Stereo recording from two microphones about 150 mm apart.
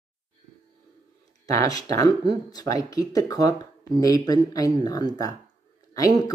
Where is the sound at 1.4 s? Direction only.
25° left (ahead or behind).